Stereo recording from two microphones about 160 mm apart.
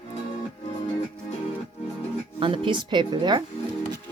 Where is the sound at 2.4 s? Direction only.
30° right (ahead or behind).